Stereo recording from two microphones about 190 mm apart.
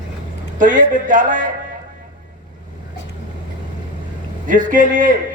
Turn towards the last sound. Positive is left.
turn(degrees=-45)  # may be behind; listen again after turning